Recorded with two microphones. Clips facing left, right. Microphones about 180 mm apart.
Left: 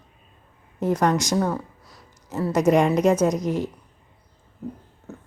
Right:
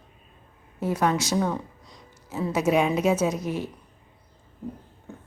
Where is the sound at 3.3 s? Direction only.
15° left (ahead or behind).